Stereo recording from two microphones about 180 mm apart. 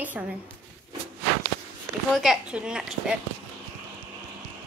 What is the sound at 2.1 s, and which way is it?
Speech, centre (ahead or behind).